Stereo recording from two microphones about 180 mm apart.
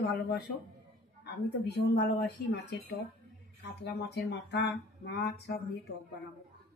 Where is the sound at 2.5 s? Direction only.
70° left (ahead or behind).